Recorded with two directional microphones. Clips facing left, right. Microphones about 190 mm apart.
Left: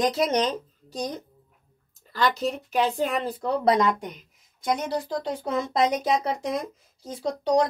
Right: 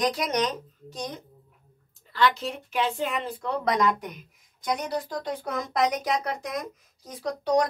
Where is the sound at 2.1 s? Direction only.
40° left (ahead or behind).